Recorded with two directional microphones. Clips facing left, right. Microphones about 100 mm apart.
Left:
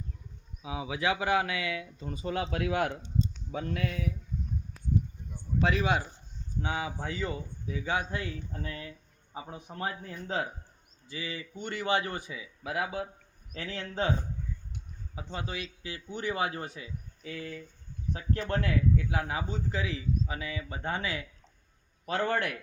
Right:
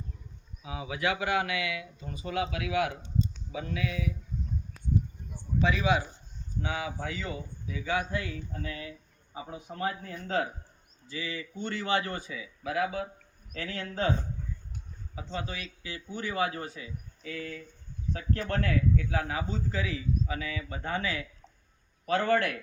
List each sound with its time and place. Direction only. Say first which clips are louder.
0.6 s speech: even; 20° left (ahead or behind); by 4.0 s 50° left (ahead or behind)
6.6 s a man's voice: even; 25° left (ahead or behind)
9.6 s a man's voice: right 3 dB; 25° left (ahead or behind)
15.1 s a man's voice: right 1 dB; 20° left (ahead or behind)